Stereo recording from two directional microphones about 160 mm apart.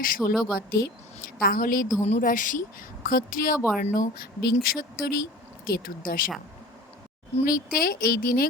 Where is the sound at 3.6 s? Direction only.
5° right (ahead or behind).